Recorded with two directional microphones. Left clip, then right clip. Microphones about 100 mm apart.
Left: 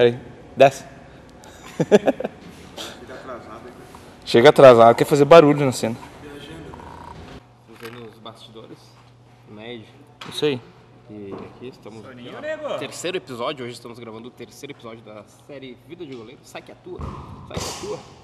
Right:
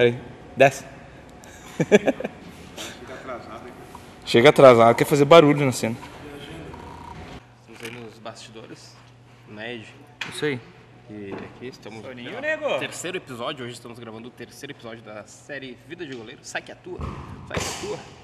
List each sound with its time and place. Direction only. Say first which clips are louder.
0.6 s a man's voice: left 3 dB; 10° left (ahead or behind)
1.6 s a sound: left 2 dB; 10° left (ahead or behind)
4.2 s a man's voice: left 3 dB; 15° left (ahead or behind)
10.3 s speech: left 5 dB; 20° left (ahead or behind)
12.2 s speech: right 3 dB; 25° left (ahead or behind)
17.6 s a sound: even; 20° right (ahead or behind)